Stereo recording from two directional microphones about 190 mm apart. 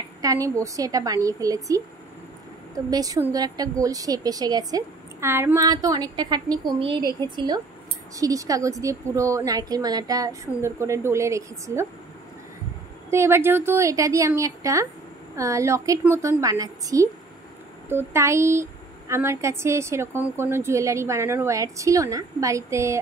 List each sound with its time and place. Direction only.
0.2 s a woman's voice: 15° right (ahead or behind)
13.1 s a woman's voice: 15° right (ahead or behind)